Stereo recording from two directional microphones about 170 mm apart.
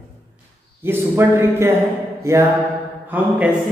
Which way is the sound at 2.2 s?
15° right (ahead or behind).